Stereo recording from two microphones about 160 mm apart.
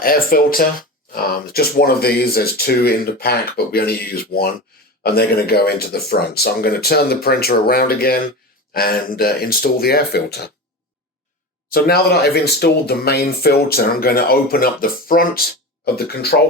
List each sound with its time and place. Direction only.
0.0 s speech: 65° left (ahead or behind); by 10.5 s 90° left
11.7 s speech: 75° left (ahead or behind)